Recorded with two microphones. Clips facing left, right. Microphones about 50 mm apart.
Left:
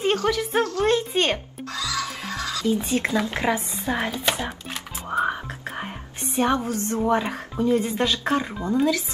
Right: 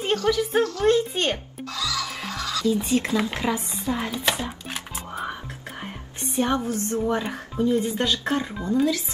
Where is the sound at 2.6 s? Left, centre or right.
Left.